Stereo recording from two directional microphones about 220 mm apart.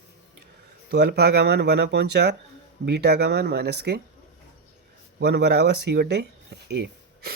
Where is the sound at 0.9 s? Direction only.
45° right (ahead or behind).